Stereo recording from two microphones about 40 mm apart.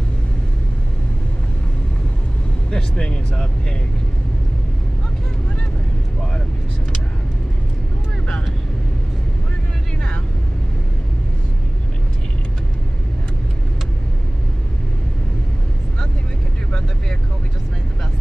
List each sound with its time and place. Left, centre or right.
2.7 s speech: left